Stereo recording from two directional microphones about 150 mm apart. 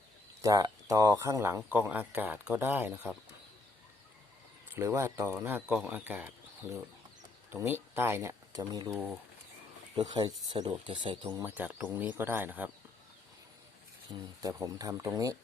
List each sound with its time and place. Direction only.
0.4 s speech: 20° right (ahead or behind)
4.7 s speech: 15° right (ahead or behind)
10.1 s speech: 30° right (ahead or behind)
11.4 s speech: 10° right (ahead or behind)
14.2 s speech: 25° right (ahead or behind)